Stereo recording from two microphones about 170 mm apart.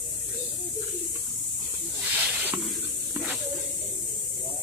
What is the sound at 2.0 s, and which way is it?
Snake, 10° right (ahead or behind).